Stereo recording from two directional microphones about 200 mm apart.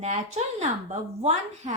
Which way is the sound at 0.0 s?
35° right (ahead or behind).